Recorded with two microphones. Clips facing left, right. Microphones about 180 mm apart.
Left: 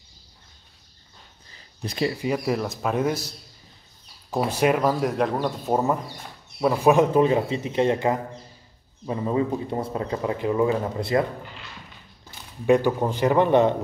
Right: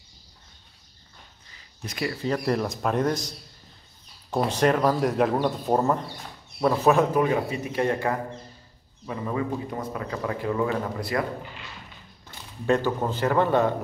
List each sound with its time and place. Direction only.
1.8 s speech: 30° left (ahead or behind)
2.2 s speech: 5° left (ahead or behind)
4.3 s speech: 5° left (ahead or behind); by 11.2 s 25° left (ahead or behind)
12.6 s a man's voice: 15° left (ahead or behind)